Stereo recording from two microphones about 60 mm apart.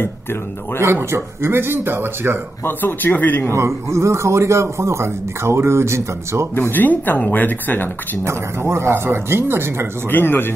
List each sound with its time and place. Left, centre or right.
0.7 s speech: right
2.6 s speech: left
3.5 s speech: right
6.7 s speech: left
8.2 s speech: right
10.0 s speech: left